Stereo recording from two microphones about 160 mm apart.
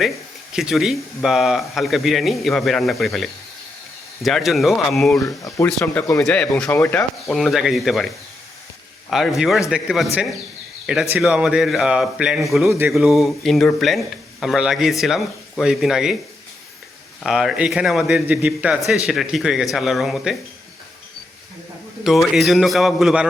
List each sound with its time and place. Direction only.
0.5 s speech: 5° right (ahead or behind)
5.2 s speech: 20° left (ahead or behind); by 12.6 s centre (ahead or behind)
12.6 s speech: 15° right (ahead or behind)
12.9 s speech: centre (ahead or behind)
17.2 s speech: 5° right (ahead or behind)
22.0 s speech: centre (ahead or behind)